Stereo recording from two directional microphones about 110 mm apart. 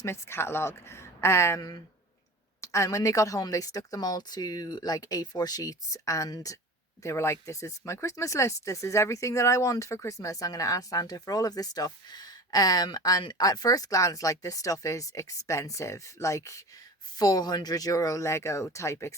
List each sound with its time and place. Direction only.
0.0 s speech: 25° left (ahead or behind)